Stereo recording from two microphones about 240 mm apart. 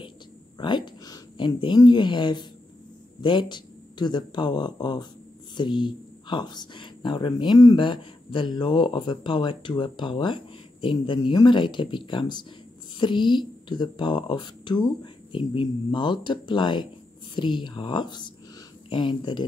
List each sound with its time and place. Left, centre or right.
0.6 s speech: centre